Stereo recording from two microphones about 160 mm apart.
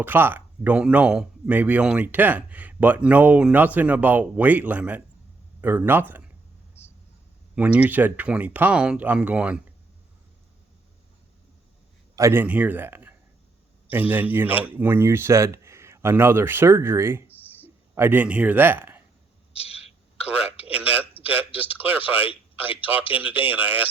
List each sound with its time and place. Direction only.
0.0 s a man's voice: 10° right (ahead or behind)
7.5 s speech: 10° right (ahead or behind)
12.1 s a man's voice: 15° right (ahead or behind)
17.3 s a sound: 10° left (ahead or behind)
17.9 s speech: 10° right (ahead or behind)
19.5 s a sound: 40° left (ahead or behind)
20.2 s telephone: 10° right (ahead or behind)
20.7 s a man's voice: 10° right (ahead or behind)